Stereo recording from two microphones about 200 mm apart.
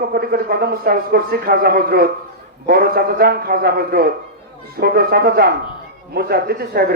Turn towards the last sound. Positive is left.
turn(degrees=-50)  # may be behind; listen again after turning